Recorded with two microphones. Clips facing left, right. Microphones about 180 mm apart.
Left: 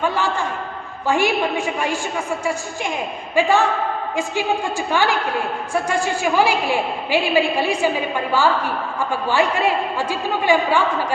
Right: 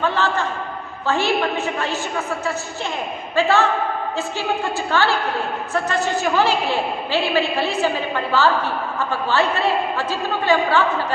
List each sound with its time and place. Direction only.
0.0 s a sound: 10° left (ahead or behind)
1.0 s a man's voice: 15° left (ahead or behind)
4.9 s a man's voice: 15° left (ahead or behind)